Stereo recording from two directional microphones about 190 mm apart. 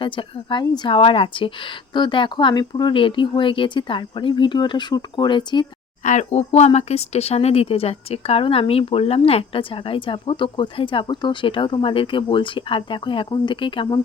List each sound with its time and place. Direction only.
0.0 s speech: 25° left (ahead or behind)
6.0 s speech: 40° left (ahead or behind)